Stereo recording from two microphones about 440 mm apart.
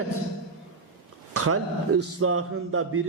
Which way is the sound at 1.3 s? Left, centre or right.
Right.